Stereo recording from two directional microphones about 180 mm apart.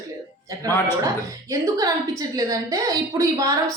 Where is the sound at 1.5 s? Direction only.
20° right (ahead or behind).